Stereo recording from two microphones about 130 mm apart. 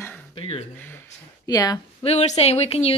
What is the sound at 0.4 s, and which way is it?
Speech, 50° left (ahead or behind).